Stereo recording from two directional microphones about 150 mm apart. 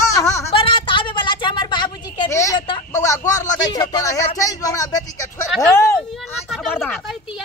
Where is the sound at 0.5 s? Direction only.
35° left (ahead or behind).